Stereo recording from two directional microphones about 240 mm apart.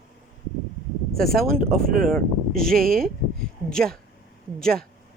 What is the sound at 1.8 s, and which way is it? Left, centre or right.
Speech, right.